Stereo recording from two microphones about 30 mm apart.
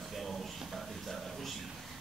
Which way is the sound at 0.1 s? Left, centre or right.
Centre.